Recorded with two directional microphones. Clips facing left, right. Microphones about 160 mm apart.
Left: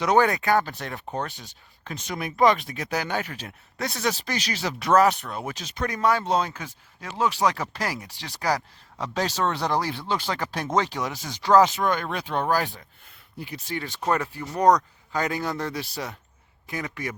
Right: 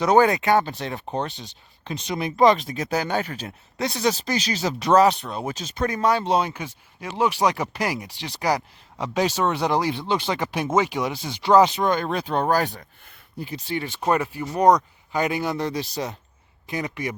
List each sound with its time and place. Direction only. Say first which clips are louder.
0.0 s speech: right 3 dB; 25° right (ahead or behind)
6.2 s speech: right 3 dB; 15° right (ahead or behind); by 12.7 s 40° right (ahead or behind)
13.4 s speech: right 4 dB; 30° right (ahead or behind)
13.8 s speech: right 3 dB; 15° right (ahead or behind)